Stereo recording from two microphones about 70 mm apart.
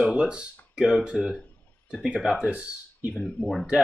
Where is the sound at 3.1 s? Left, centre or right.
Centre.